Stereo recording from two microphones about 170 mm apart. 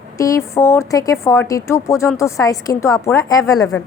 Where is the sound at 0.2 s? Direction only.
20° left (ahead or behind).